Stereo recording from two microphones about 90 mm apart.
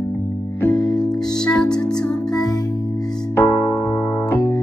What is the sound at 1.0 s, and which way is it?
Music, 10° left (ahead or behind).